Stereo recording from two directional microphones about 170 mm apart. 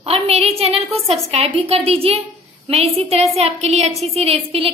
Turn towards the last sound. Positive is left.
turn(degrees=-35)  # may be behind; listen again after turning